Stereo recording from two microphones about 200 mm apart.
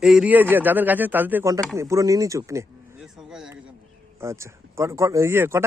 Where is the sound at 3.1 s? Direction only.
Centre (ahead or behind).